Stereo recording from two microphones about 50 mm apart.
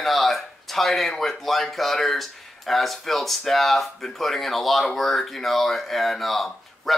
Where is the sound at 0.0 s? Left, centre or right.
Centre.